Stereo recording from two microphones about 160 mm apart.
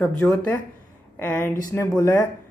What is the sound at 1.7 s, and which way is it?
Speech, 15° left (ahead or behind).